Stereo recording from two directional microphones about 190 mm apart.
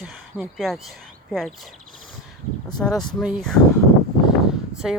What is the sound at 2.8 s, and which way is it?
Speech, 5° left (ahead or behind).